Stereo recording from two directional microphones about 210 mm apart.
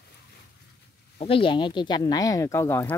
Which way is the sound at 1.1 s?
25° left (ahead or behind).